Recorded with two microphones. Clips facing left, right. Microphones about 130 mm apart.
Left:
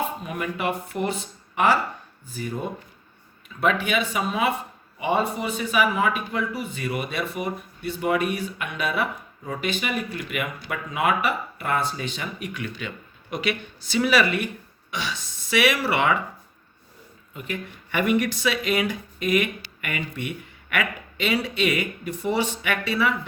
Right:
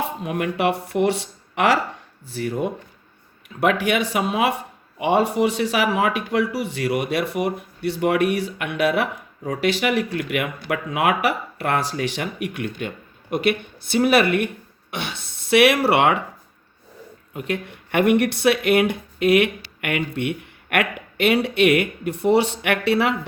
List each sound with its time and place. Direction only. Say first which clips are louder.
0.2 s speech: right 6 dB; 65° right (ahead or behind); by 1.8 s 85° right
2.2 s speech: right 6 dB; 75° right (ahead or behind)
17.3 s speech: right 6 dB; 70° right (ahead or behind)